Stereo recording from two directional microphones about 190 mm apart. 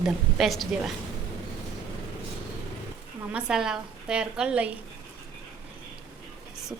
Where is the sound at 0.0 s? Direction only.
Centre (ahead or behind).